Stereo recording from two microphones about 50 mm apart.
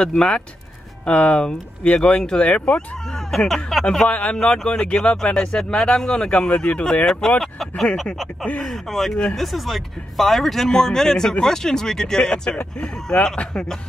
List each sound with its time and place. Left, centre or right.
0.0 s speech: centre
1.0 s speech: left
2.4 s speech: left
3.3 s speech: centre
4.1 s speech: left
4.4 s speech: centre